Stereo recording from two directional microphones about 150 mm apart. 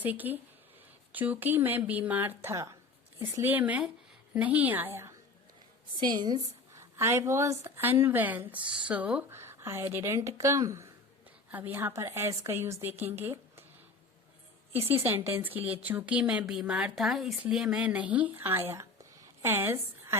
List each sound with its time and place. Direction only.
0.0 s speech: 10° right (ahead or behind)
6.0 s speech: 30° right (ahead or behind)
14.8 s speech: 15° right (ahead or behind)